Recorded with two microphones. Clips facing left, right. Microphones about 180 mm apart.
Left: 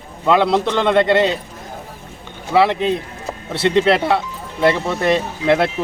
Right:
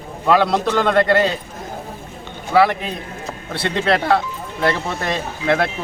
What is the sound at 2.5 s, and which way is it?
Speech, 25° left (ahead or behind).